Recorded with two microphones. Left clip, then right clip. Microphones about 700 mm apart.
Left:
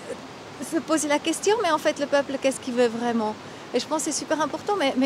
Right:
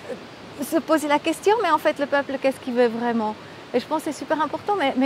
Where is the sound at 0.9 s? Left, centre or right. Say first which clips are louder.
Right 2 dB; right.